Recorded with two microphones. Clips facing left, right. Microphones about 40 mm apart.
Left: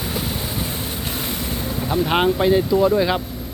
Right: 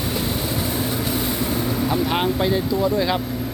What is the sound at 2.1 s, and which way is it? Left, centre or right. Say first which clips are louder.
Speech: left 4 dB; left.